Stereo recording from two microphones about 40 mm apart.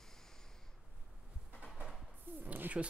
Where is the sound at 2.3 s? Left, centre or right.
Right.